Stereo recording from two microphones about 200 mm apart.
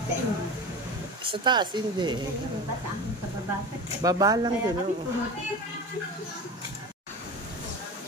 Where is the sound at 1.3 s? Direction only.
20° right (ahead or behind).